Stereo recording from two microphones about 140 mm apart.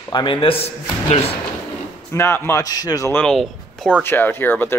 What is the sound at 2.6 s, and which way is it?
Speech, 25° left (ahead or behind).